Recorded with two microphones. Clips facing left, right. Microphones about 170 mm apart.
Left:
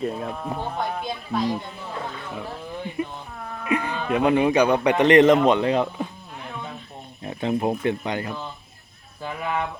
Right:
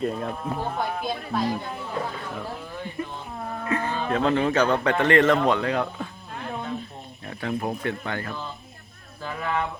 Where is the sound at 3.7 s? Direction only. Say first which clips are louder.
Left 2 dB; 15° left (ahead or behind).